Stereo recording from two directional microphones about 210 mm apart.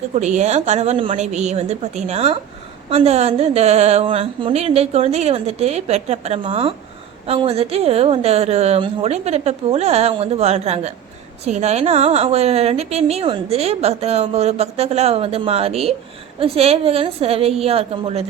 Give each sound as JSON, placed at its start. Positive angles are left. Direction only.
{"t": 0.1, "sound": "a woman's voice", "side_deg": -35}